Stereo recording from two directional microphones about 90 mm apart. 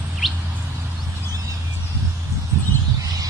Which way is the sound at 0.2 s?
Centre (ahead or behind).